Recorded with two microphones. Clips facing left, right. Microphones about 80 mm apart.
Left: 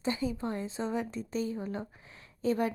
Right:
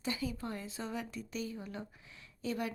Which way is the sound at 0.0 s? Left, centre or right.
Left.